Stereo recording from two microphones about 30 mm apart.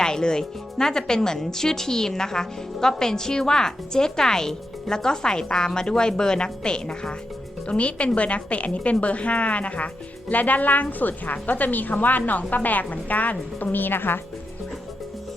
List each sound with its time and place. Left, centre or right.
0.0 s speech: left
7.7 s a woman's voice: left